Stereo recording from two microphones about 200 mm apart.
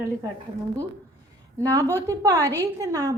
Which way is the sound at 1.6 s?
15° right (ahead or behind).